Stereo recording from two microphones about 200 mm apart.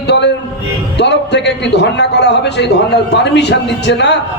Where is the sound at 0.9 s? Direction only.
60° left (ahead or behind).